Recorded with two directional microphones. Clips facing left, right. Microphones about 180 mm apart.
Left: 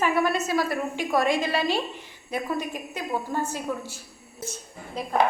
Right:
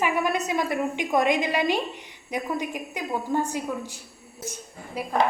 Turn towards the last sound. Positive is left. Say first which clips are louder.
# right 1 dB
turn(degrees=-10)  # may be behind; listen again after turning